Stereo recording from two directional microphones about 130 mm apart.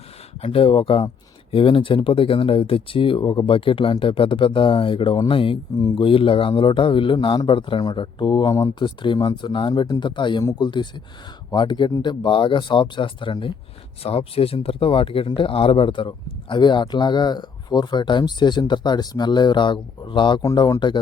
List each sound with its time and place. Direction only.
0.4 s a man's voice: 45° left (ahead or behind)